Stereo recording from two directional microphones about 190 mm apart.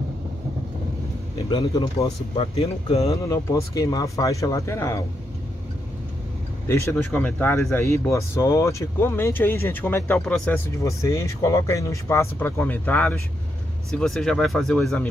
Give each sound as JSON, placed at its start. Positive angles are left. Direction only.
{"t": 1.5, "sound": "speech", "side_deg": 20}
{"t": 2.9, "sound": "speech", "side_deg": 15}
{"t": 6.7, "sound": "speech", "side_deg": 15}
{"t": 10.8, "sound": "speech", "side_deg": 15}